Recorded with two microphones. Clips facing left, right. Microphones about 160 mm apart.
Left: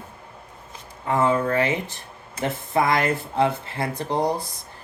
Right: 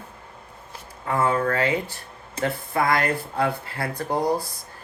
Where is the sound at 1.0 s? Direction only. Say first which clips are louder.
Left 2 dB; 20° left (ahead or behind).